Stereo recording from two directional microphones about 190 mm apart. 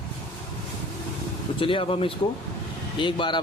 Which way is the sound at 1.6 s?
25° left (ahead or behind).